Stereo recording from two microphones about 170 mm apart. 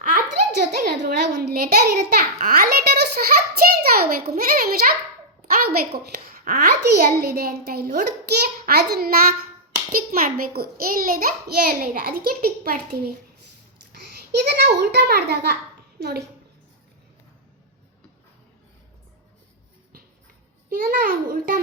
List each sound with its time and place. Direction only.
0.0 s a sound: 50° right (ahead or behind)
0.8 s a child's voice: 75° right (ahead or behind)
3.6 s a sound: 60° right (ahead or behind)
4.3 s a child's voice: 60° right (ahead or behind)
6.9 s a child's voice: 65° right (ahead or behind)
14.4 s a child's voice: 75° right (ahead or behind)
20.7 s a child's voice: 60° right (ahead or behind)